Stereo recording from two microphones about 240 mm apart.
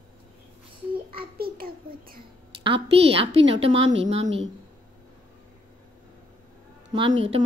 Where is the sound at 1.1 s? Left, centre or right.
Right.